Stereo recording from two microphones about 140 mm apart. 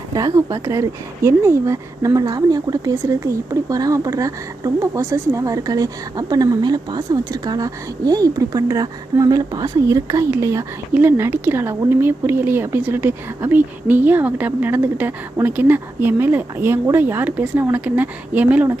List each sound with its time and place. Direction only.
0.1 s speech: 25° right (ahead or behind)